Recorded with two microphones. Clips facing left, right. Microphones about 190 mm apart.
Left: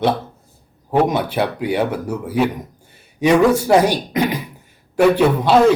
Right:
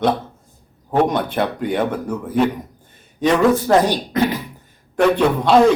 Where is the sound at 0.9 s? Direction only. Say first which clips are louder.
Left 1 dB; 5° left (ahead or behind).